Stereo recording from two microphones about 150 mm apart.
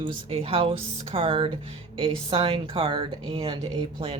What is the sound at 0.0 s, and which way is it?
Speech, 40° right (ahead or behind).